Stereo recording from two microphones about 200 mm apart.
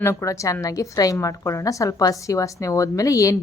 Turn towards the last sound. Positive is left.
turn(degrees=15)  # may be behind; listen again after turning